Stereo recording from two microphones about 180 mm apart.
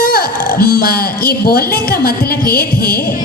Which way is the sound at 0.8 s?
55° left (ahead or behind).